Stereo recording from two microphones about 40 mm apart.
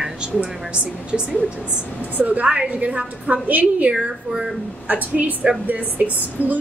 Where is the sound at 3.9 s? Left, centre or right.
Centre.